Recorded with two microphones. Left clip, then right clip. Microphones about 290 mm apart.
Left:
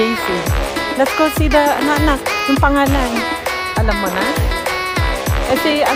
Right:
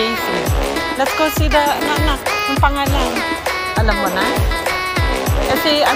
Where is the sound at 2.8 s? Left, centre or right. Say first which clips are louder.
Left 3 dB; left.